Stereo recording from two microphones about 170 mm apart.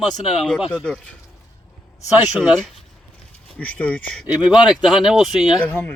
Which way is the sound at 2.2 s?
5° right (ahead or behind).